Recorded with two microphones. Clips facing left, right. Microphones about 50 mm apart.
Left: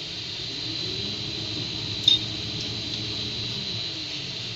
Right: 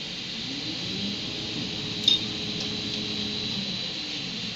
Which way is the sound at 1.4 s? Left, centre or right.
Right.